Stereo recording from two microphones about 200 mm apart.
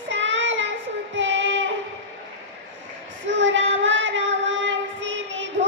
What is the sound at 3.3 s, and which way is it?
Child singing, 65° right (ahead or behind).